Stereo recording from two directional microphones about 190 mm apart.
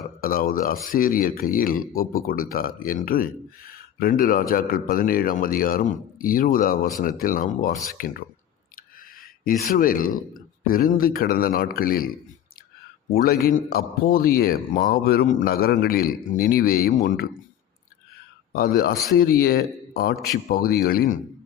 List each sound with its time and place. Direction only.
0.2 s speech: 50° left (ahead or behind)
9.4 s speech: 45° left (ahead or behind)
13.2 s speech: 50° left (ahead or behind)
18.5 s a man's voice: 50° left (ahead or behind)